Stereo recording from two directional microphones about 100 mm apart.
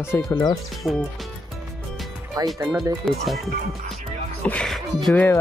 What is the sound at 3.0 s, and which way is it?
Speech, centre (ahead or behind).